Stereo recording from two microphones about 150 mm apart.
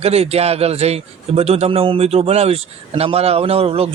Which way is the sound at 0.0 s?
45° right (ahead or behind).